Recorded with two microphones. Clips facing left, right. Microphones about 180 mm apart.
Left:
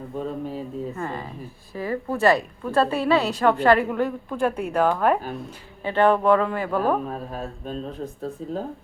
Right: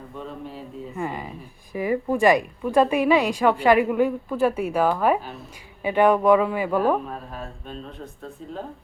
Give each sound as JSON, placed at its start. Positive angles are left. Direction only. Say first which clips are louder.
{"t": 0.2, "sound": "speech", "louder": "left 6 dB", "side_deg": 40}
{"t": 0.9, "sound": "a woman's voice", "louder": "right 1 dB", "side_deg": -15}
{"t": 7.3, "sound": "speech", "louder": "left 5 dB", "side_deg": 40}